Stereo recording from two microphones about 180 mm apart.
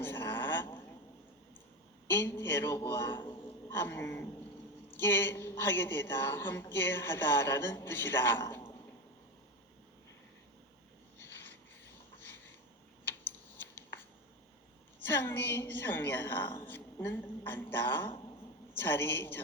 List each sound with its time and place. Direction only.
0.0 s a sound: 10° left (ahead or behind)
2.0 s a woman's voice: 10° left (ahead or behind)
3.1 s a man's voice: 25° left (ahead or behind)
3.8 s a woman's voice: 15° left (ahead or behind)
13.6 s a sound: 10° left (ahead or behind)
15.0 s a woman's voice: 10° left (ahead or behind)